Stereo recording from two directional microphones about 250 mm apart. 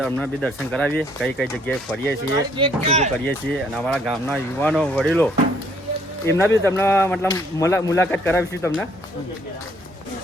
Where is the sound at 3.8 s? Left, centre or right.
Centre.